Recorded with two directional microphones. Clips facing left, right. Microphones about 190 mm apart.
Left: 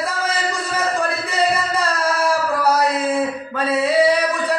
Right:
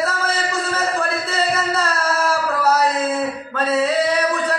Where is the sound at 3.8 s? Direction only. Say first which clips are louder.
Left 4 dB; 10° left (ahead or behind).